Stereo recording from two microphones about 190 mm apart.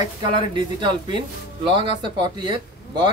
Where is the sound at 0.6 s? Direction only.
25° right (ahead or behind).